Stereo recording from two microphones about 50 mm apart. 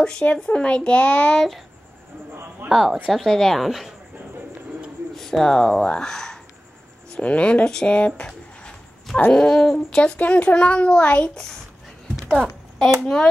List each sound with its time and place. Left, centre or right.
0.0 s speech: centre
1.3 s speech: centre
2.7 s a woman's voice: centre
5.1 s speech: centre
7.2 s speech: left
10.1 s speech: left
13.0 s speech: centre